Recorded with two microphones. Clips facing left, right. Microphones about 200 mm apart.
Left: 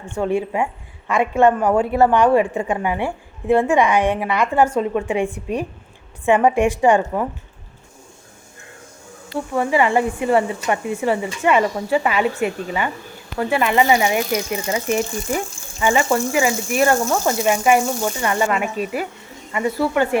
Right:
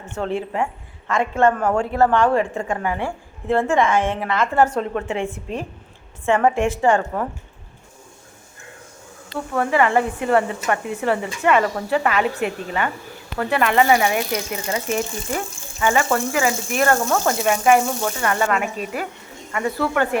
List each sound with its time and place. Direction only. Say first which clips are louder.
0.1 s a woman's voice: left 4 dB; 15° left (ahead or behind)
9.3 s a woman's voice: left 2 dB; 10° left (ahead or behind)